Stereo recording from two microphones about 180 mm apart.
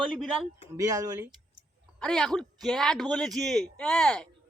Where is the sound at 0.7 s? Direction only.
15° right (ahead or behind).